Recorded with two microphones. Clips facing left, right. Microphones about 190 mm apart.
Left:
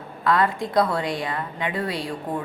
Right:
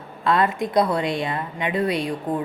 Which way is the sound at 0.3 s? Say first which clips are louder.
Right 1 dB; 20° right (ahead or behind).